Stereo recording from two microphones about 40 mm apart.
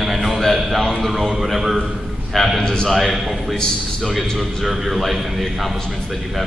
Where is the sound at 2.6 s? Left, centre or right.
Centre.